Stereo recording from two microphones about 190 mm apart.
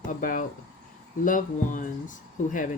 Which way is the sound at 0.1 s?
45° left (ahead or behind).